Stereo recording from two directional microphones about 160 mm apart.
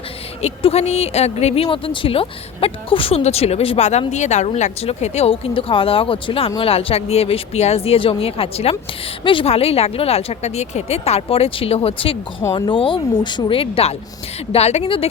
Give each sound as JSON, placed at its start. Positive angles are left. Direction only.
{"t": 0.4, "sound": "speech", "side_deg": 40}